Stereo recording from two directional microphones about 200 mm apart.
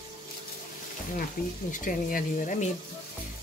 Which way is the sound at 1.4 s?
45° left (ahead or behind).